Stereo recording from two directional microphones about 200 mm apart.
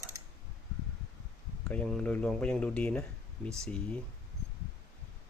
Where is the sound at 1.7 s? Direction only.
5° left (ahead or behind).